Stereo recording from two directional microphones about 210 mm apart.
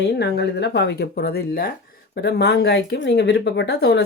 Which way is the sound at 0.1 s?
50° left (ahead or behind).